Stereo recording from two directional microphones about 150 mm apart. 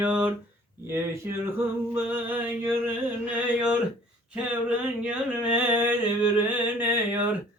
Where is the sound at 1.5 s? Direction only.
15° right (ahead or behind).